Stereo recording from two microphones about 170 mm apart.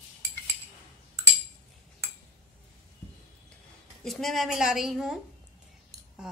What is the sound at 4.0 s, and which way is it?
A woman's voice, centre (ahead or behind).